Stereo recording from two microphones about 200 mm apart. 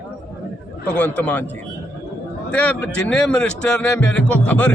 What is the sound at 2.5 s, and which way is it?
A man's voice, 5° left (ahead or behind).